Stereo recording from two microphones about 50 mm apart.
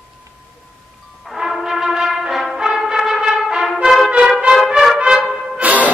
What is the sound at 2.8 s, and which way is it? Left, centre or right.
Trumpet, centre.